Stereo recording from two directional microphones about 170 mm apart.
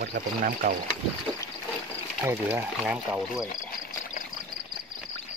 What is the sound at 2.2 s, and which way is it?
Speech, 10° right (ahead or behind).